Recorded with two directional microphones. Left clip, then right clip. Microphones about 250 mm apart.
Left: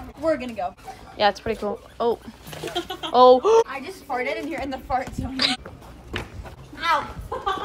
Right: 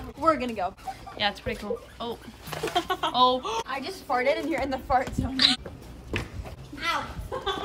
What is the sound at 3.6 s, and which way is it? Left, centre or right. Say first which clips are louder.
A woman's voice: right 1 dB; centre.